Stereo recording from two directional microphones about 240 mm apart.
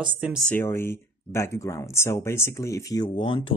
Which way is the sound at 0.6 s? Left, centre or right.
Centre.